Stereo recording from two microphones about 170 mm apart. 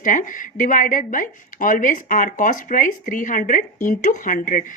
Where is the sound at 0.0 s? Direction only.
50° left (ahead or behind).